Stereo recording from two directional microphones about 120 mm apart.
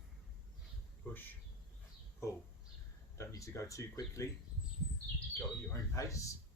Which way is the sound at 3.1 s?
25° left (ahead or behind).